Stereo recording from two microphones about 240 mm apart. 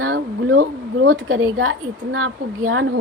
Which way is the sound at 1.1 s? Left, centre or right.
Right.